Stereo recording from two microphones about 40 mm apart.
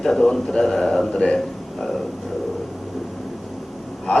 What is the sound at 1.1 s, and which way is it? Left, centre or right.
Speech, left.